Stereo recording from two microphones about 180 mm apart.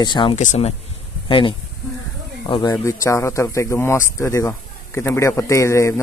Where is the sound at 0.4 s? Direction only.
40° left (ahead or behind).